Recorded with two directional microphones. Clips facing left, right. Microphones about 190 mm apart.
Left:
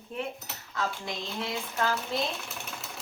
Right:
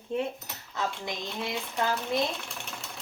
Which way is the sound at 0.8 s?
20° right (ahead or behind).